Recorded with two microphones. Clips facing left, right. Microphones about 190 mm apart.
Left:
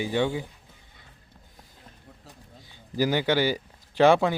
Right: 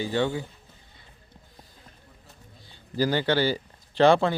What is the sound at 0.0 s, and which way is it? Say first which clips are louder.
Speech: even; 15° left (ahead or behind).